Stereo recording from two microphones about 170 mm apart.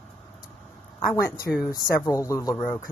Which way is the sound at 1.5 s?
Centre (ahead or behind).